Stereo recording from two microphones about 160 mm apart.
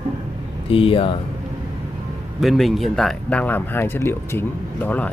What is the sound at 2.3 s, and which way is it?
Speech, centre (ahead or behind).